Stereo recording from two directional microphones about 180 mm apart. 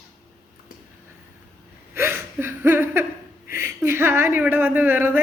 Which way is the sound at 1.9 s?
15° right (ahead or behind).